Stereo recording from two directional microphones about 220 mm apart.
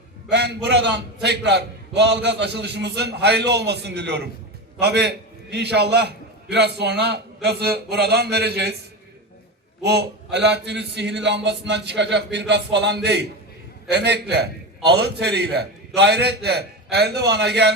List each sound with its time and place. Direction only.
0.3 s a man's voice: 50° right (ahead or behind)
9.8 s a man's voice: 50° right (ahead or behind)